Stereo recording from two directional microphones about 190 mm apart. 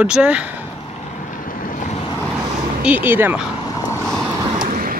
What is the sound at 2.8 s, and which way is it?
Speech, 10° right (ahead or behind).